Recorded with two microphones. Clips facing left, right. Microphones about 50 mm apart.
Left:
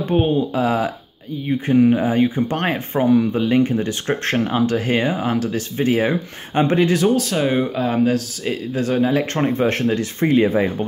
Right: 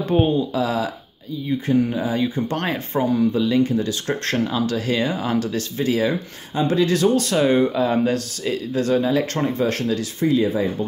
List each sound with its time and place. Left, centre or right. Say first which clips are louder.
0.3 s speech: left 2 dB; left
5.1 s speech: left 2 dB; centre
5.8 s speech: left 3 dB; left
7.2 s speech: right 2 dB; centre
8.5 s speech: right 1 dB; centre; by 10.0 s left
10.2 s speech: left 3 dB; left